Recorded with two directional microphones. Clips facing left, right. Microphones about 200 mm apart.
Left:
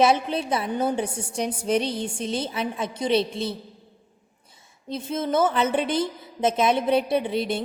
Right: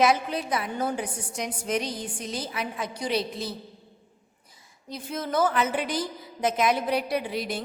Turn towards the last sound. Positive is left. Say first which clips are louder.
# left 5 dB
turn(degrees=25)  # may be behind; listen again after turning